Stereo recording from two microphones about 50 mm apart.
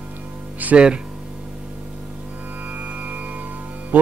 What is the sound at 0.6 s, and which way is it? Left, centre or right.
Music, right.